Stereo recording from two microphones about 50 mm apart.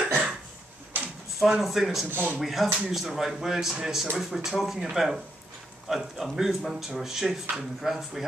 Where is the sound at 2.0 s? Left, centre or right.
Right.